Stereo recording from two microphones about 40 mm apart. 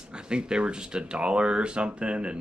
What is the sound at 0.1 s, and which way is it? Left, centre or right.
Speech, right.